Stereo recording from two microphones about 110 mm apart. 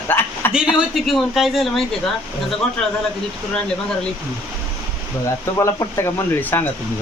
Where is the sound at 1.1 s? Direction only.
Centre (ahead or behind).